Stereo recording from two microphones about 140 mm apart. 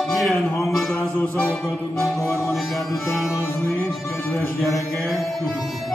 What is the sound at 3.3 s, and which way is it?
Music, 20° left (ahead or behind).